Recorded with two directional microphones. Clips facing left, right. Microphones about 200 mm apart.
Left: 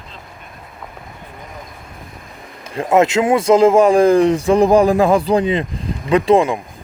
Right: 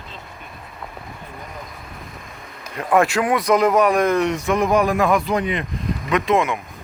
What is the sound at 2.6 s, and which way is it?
Speech, 25° left (ahead or behind).